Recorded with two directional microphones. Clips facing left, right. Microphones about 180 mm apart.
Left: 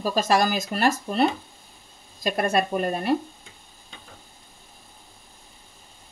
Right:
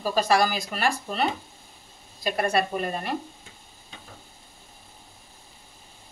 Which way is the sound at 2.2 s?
45° left (ahead or behind).